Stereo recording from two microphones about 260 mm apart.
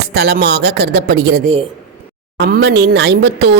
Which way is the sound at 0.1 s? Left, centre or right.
Right.